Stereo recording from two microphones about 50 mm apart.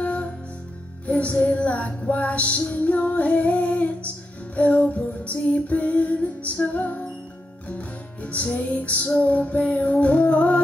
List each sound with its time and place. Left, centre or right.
0.0 s music: left